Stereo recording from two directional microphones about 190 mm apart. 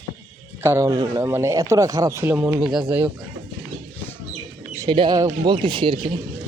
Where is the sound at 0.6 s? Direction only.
15° right (ahead or behind).